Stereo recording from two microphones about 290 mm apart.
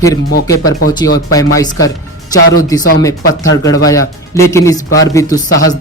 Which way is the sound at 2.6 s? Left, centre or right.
Centre.